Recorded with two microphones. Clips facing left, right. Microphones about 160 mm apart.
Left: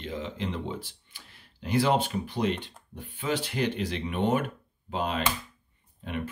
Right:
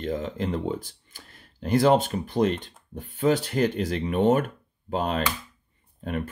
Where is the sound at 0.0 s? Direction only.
45° right (ahead or behind).